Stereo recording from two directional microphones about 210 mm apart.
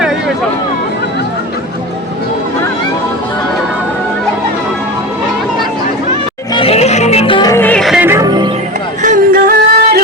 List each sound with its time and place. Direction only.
6.5 s music: 25° left (ahead or behind); by 8.4 s 20° right (ahead or behind)
9.0 s music: 45° right (ahead or behind)